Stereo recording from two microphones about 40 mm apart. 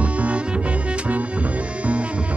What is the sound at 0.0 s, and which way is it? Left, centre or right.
Music, right.